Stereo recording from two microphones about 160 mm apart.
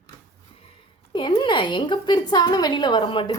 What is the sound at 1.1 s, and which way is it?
Speech, 30° left (ahead or behind).